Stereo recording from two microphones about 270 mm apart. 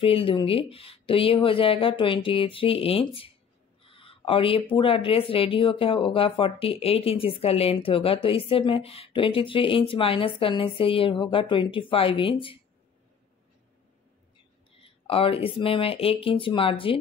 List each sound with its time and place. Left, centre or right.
0.0 s speech: left
14.8 s speech: left